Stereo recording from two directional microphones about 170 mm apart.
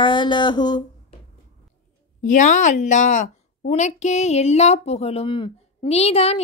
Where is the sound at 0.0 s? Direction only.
25° left (ahead or behind).